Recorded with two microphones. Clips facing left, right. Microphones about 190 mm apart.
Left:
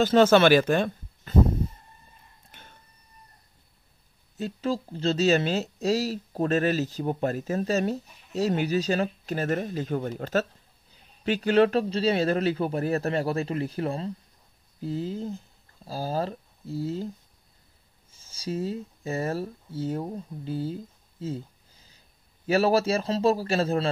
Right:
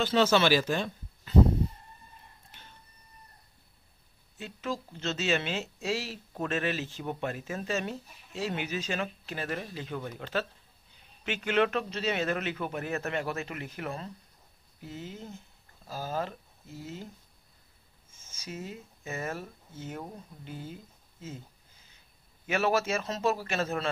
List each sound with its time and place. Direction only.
0.0 s speech: 50° left (ahead or behind)
2.5 s a sound: 55° left (ahead or behind)
4.4 s speech: 35° left (ahead or behind)
18.1 s speech: 35° left (ahead or behind)
22.5 s speech: 35° left (ahead or behind)